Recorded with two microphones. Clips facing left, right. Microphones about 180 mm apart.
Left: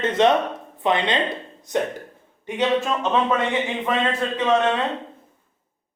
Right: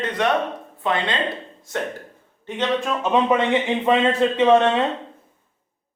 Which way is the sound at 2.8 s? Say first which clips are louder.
Left 1 dB; centre (ahead or behind).